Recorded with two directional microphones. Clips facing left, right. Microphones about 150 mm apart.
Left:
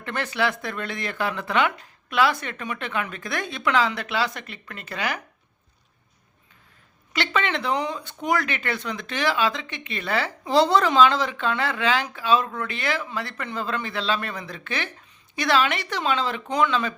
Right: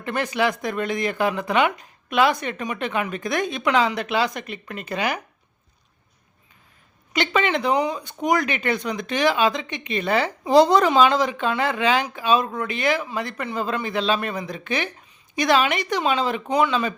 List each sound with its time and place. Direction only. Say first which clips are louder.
0.0 s speech: right 3 dB; 15° right (ahead or behind)
7.1 s speech: right 4 dB; 15° right (ahead or behind)